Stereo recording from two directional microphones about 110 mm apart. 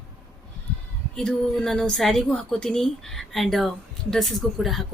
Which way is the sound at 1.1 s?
5° left (ahead or behind).